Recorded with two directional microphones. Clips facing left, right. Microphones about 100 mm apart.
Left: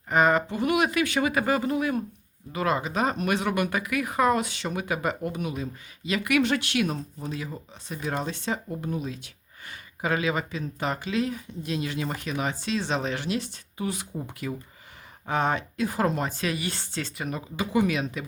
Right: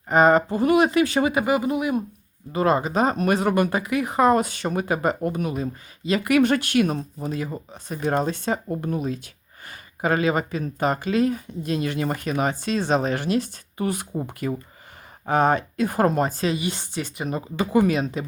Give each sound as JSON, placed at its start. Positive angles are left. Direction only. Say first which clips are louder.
{"t": 0.1, "sound": "speech", "louder": "right 5 dB", "side_deg": -35}
{"t": 1.3, "sound": "speech", "louder": "right 3 dB", "side_deg": -15}
{"t": 2.5, "sound": "speech", "louder": "right 6 dB", "side_deg": -35}
{"t": 16.5, "sound": "speech", "louder": "right 5 dB", "side_deg": -20}
{"t": 17.6, "sound": "speech", "louder": "right 5 dB", "side_deg": -45}